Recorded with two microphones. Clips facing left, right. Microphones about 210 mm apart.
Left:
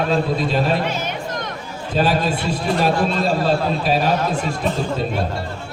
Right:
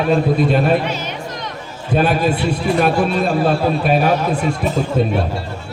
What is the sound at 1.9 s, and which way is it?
A man's voice, 60° right (ahead or behind).